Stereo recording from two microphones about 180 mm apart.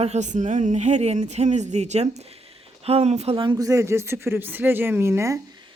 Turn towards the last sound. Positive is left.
turn(degrees=-15)  # may be behind; listen again after turning